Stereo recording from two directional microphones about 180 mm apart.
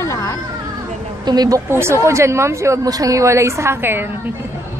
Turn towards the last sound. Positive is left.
turn(degrees=-10)  # may be behind; listen again after turning